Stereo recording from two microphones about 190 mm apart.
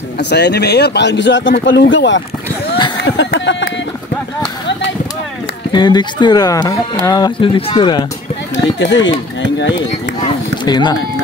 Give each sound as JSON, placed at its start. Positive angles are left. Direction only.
{"t": 0.2, "sound": "speech", "side_deg": 60}
{"t": 5.7, "sound": "speech", "side_deg": 25}
{"t": 8.7, "sound": "speech", "side_deg": 75}
{"t": 10.6, "sound": "speech", "side_deg": 20}